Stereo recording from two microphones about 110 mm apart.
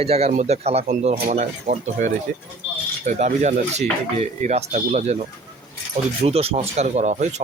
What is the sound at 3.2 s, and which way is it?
Speech, 90° right.